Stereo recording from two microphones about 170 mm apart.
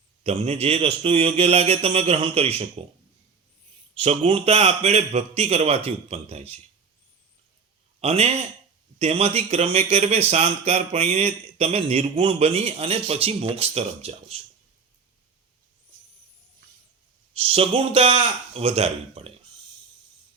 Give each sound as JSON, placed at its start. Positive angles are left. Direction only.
{"t": 0.2, "sound": "speech", "side_deg": -40}
{"t": 4.0, "sound": "speech", "side_deg": -35}
{"t": 8.0, "sound": "speech", "side_deg": -40}
{"t": 17.3, "sound": "speech", "side_deg": -35}